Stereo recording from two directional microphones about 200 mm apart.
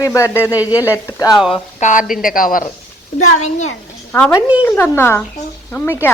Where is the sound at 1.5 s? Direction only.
40° left (ahead or behind).